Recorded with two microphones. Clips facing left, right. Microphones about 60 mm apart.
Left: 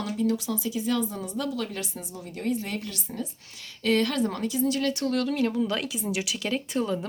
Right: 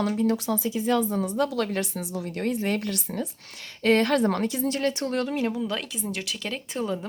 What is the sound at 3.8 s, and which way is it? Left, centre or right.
A woman's voice, right.